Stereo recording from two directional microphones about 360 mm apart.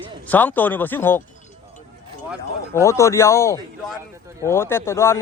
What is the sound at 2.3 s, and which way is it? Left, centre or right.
Speech, centre.